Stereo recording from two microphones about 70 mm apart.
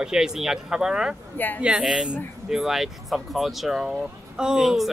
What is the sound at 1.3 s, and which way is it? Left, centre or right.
Speech, left.